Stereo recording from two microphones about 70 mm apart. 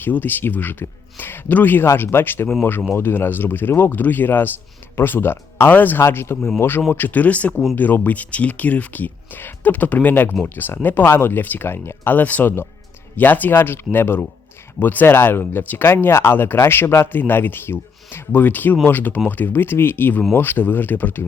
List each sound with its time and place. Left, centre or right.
0.0 s speech: left